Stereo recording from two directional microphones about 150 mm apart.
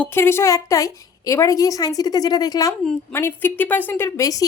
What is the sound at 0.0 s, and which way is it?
A woman's voice, 15° left (ahead or behind).